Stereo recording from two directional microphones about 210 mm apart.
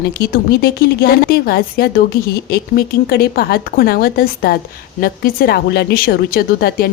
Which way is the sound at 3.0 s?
45° left (ahead or behind).